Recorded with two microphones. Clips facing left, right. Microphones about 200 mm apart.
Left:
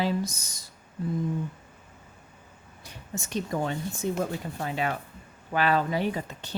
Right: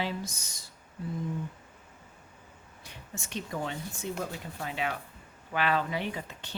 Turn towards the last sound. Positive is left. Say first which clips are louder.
# left 7 dB
turn(degrees=40)  # may be behind; listen again after turning